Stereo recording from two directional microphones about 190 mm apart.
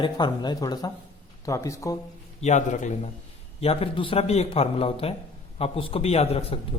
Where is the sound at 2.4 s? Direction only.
40° left (ahead or behind).